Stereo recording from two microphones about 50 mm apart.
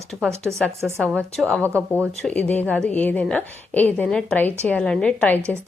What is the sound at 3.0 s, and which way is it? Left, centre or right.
A woman's voice, left.